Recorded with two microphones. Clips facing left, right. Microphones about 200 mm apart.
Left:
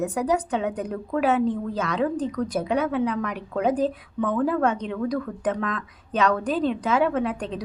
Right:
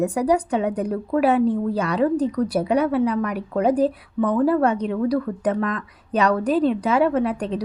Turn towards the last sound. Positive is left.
turn(degrees=-35)  # may be behind; listen again after turning